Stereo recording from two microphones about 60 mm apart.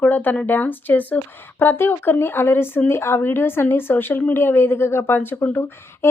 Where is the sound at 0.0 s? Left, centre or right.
Left.